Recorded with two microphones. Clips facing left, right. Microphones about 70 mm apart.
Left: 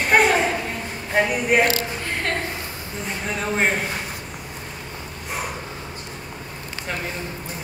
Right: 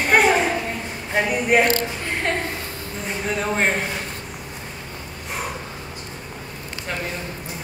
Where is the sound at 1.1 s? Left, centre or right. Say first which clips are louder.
Even; centre.